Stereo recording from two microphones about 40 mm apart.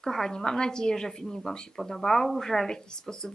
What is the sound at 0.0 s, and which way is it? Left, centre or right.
Speech, centre.